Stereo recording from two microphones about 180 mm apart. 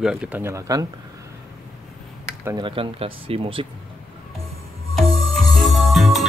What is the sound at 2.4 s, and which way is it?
Speech, 25° right (ahead or behind).